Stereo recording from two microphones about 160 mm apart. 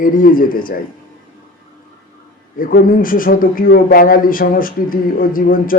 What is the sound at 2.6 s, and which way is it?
Speech, 60° left (ahead or behind).